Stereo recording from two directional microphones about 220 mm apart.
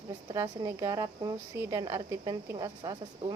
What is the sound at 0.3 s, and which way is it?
A woman's voice, 15° right (ahead or behind).